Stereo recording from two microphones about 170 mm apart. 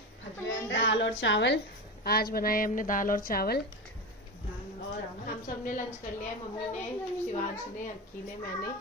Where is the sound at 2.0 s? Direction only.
65° left (ahead or behind).